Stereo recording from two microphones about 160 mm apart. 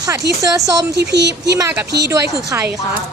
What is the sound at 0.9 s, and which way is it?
Speech, 90° right.